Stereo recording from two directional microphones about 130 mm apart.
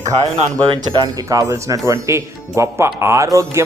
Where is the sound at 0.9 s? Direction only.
30° right (ahead or behind).